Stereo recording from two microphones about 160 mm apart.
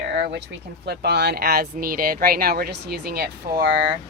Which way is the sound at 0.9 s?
90° right.